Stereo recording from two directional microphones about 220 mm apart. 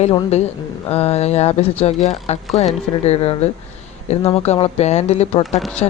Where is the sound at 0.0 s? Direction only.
25° left (ahead or behind).